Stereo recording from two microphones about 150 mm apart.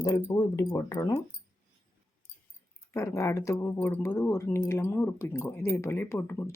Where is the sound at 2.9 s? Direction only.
20° left (ahead or behind).